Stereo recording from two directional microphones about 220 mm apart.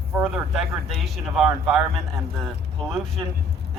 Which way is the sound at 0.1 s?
5° right (ahead or behind).